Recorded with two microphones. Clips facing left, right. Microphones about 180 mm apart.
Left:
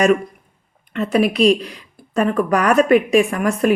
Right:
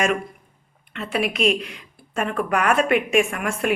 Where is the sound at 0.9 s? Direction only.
40° left (ahead or behind).